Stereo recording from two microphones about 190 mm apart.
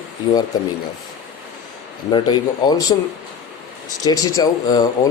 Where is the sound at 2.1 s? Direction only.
25° left (ahead or behind).